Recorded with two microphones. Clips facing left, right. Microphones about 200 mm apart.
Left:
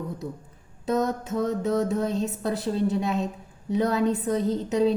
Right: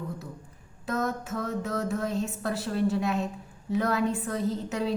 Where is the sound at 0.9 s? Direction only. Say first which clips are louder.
Left 5 dB; 20° left (ahead or behind).